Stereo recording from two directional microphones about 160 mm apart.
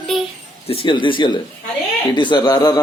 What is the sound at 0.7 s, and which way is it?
Speech, 35° left (ahead or behind).